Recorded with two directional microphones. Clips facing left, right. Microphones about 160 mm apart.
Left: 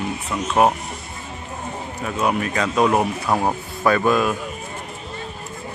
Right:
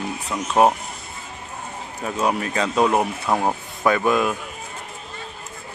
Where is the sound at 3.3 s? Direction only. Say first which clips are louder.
Even; centre (ahead or behind).